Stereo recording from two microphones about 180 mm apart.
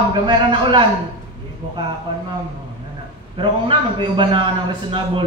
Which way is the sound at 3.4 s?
25° right (ahead or behind).